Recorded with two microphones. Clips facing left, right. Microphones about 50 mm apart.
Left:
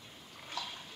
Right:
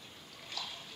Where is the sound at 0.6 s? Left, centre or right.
Left.